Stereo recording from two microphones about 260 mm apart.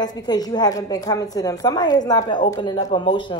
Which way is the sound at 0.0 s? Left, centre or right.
Centre.